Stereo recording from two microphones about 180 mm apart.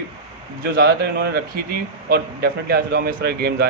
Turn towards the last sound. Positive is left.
turn(degrees=-65)  # may be behind; listen again after turning